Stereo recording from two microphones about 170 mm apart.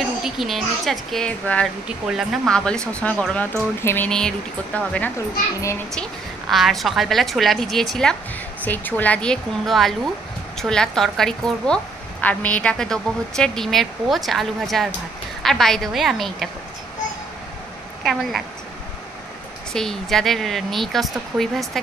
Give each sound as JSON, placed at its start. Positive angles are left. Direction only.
{"t": 0.2, "sound": "a woman's voice", "side_deg": 0}
{"t": 6.5, "sound": "a woman's voice", "side_deg": 0}
{"t": 19.7, "sound": "a woman's voice", "side_deg": 5}